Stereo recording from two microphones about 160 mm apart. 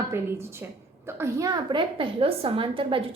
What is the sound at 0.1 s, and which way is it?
A woman's voice, 15° right (ahead or behind).